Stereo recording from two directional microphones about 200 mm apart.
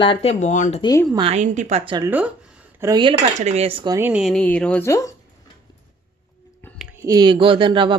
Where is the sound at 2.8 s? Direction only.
20° right (ahead or behind).